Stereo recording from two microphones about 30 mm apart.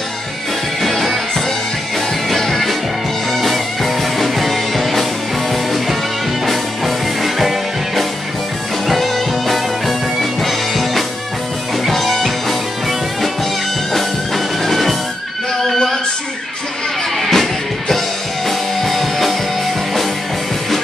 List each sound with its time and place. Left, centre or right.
0.8 s music: centre
2.4 s music: centre
7.3 s music: centre
13.9 s music: centre
17.2 s music: centre